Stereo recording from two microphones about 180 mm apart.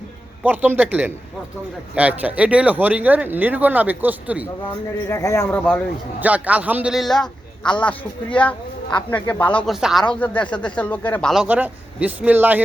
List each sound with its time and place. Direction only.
0.4 s speech: 10° right (ahead or behind)
5.0 s speech: 15° left (ahead or behind)
6.1 s a man's voice: 10° right (ahead or behind)
11.4 s speech: 10° right (ahead or behind)